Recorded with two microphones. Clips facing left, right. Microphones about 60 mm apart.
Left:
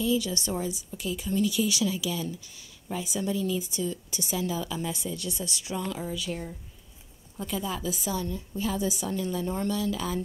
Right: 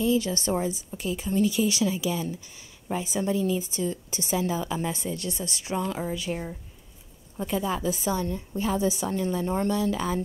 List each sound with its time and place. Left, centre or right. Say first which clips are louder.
0.0 s a woman's voice: right 3 dB; right